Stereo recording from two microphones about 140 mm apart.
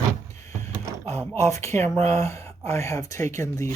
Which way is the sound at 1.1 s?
20° left (ahead or behind).